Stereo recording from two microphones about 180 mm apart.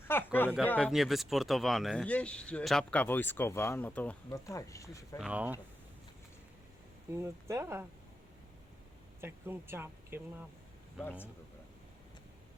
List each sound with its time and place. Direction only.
0.1 s speech: 10° left (ahead or behind)
0.8 s speech: centre (ahead or behind); by 5.0 s 15° left (ahead or behind)
5.1 s speech: 5° right (ahead or behind)
7.1 s speech: 15° right (ahead or behind)
9.2 s speech: 15° right (ahead or behind)